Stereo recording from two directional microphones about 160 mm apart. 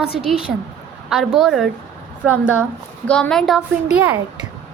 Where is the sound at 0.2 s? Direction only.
5° right (ahead or behind).